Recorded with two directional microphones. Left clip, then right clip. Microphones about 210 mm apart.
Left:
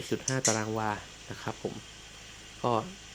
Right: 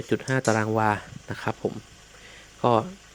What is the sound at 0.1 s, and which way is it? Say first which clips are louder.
Speech: right 6 dB; 40° right (ahead or behind).